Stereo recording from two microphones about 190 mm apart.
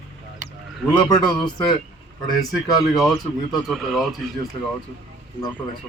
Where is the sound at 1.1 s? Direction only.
20° left (ahead or behind).